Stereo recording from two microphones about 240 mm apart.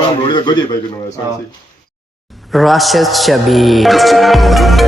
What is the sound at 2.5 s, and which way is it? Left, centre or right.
A man's voice, centre.